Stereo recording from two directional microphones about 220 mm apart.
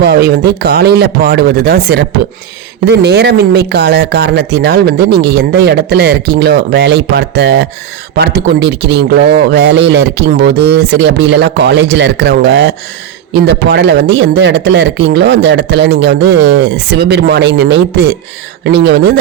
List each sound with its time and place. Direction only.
0.0 s speech: 45° right (ahead or behind)